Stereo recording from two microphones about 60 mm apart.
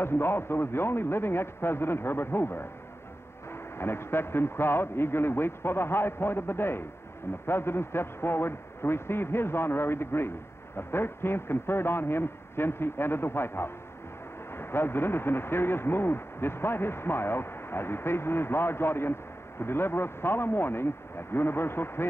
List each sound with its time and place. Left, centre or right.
0.0 s speech: left
3.7 s speech: left